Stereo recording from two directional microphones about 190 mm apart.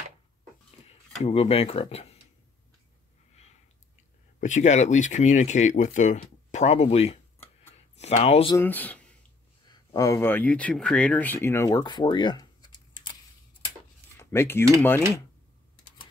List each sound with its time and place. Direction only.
0.8 s speech: 35° left (ahead or behind)
4.4 s speech: 40° left (ahead or behind)
8.5 s speech: 10° left (ahead or behind)
14.1 s cutlery: 10° left (ahead or behind)